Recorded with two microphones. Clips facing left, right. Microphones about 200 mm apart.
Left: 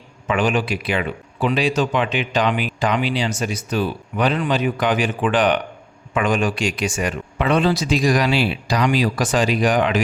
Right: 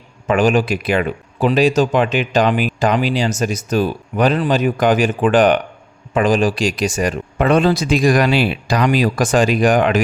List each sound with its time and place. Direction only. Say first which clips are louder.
0.3 s speech: right 5 dB; 40° right (ahead or behind)
6.1 s speech: right 5 dB; 35° right (ahead or behind)